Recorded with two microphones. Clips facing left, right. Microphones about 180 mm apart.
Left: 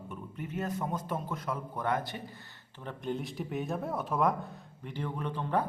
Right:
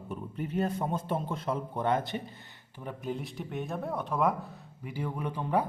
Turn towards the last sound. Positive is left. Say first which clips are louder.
# right 2 dB
turn(degrees=-10)  # may be behind; listen again after turning